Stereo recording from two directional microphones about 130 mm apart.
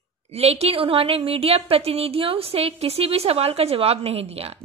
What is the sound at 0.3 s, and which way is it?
A woman's voice, 50° right (ahead or behind).